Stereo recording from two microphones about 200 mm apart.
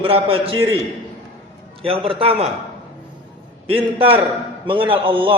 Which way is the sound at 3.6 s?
25° right (ahead or behind).